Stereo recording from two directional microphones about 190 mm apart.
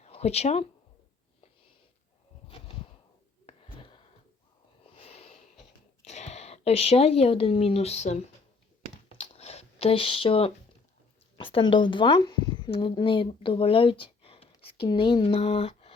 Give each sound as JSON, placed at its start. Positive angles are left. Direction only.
{"t": 0.0, "sound": "speech", "side_deg": 35}
{"t": 3.4, "sound": "whispering", "side_deg": 30}
{"t": 4.9, "sound": "wheeze", "side_deg": 30}
{"t": 6.1, "sound": "speech", "side_deg": 35}
{"t": 9.1, "sound": "a sound", "side_deg": 35}
{"t": 11.3, "sound": "a woman's voice", "side_deg": 25}